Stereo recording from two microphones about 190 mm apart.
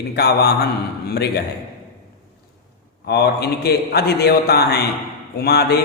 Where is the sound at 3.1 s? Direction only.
55° left (ahead or behind).